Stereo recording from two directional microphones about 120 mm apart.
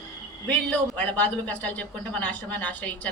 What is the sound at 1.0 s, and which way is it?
A man's voice, 15° left (ahead or behind).